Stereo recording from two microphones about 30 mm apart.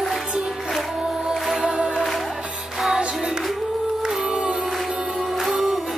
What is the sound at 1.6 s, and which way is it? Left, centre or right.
Music, right.